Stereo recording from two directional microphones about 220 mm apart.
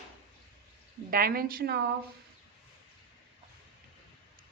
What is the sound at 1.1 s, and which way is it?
Speech, 40° right (ahead or behind).